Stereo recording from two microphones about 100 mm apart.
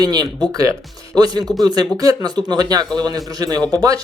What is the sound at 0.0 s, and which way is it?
Speech, 40° right (ahead or behind).